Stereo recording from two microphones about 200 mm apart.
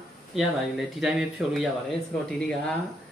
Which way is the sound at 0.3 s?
Centre (ahead or behind).